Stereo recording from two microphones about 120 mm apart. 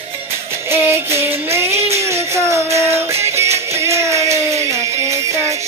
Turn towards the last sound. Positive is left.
turn(degrees=-25)  # may be behind; listen again after turning